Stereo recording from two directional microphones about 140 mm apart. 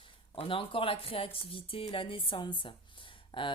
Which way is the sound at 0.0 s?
40° left (ahead or behind).